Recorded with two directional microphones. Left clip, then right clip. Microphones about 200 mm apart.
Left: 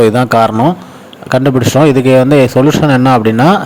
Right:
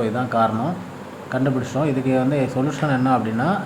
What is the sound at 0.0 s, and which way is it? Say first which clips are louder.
Speech: left 12 dB; 55° left (ahead or behind).